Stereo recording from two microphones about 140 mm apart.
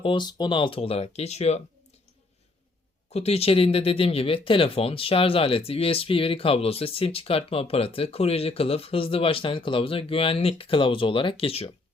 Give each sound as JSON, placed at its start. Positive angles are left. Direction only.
{"t": 0.0, "sound": "speech", "side_deg": 35}
{"t": 3.1, "sound": "speech", "side_deg": 50}